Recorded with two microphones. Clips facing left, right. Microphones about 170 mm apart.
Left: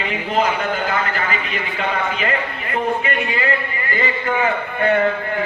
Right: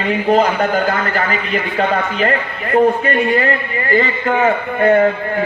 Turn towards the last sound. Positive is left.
turn(degrees=-40)  # may be behind; listen again after turning